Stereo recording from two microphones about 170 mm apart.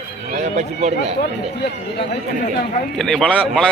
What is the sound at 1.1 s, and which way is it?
Speech, 80° left.